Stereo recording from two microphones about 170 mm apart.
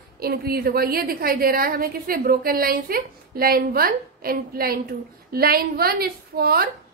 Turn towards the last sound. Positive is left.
turn(degrees=-65)  # may be behind; listen again after turning